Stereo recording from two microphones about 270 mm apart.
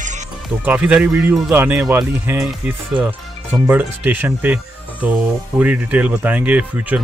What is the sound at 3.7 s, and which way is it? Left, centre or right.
Speech, centre.